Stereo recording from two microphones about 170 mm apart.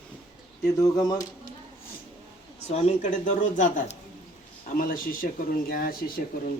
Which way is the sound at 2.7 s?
40° left (ahead or behind).